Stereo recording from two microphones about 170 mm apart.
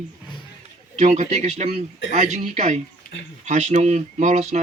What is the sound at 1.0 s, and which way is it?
A man's voice, 40° right (ahead or behind).